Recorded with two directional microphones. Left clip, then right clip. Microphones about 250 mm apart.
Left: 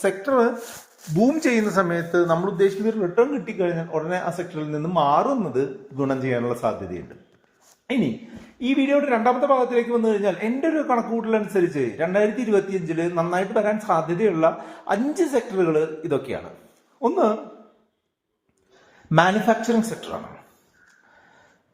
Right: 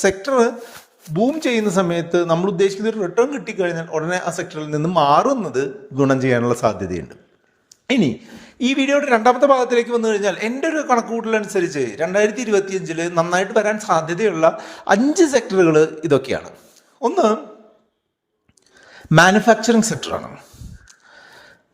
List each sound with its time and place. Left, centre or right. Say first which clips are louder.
0.0 s a man's voice: right 4 dB; right
19.1 s a man's voice: right 6 dB; right